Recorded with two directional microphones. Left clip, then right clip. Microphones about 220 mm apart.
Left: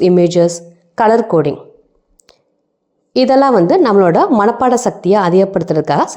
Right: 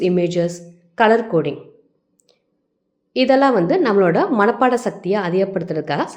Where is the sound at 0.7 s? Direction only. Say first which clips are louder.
Left 3 dB; 20° left (ahead or behind).